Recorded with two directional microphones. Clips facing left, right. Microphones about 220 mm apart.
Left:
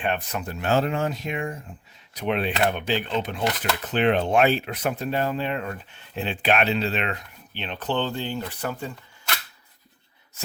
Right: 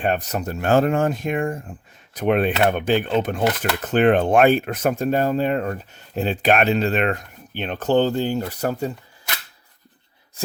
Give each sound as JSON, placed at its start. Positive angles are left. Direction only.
{"t": 0.0, "sound": "speech", "side_deg": -40}